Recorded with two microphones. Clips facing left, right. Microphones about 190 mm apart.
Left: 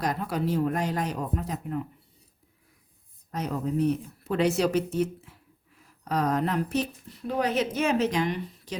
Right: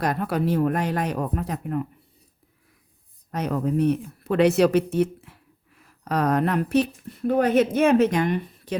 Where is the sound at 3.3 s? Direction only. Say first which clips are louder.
Right 5 dB; 70° right (ahead or behind).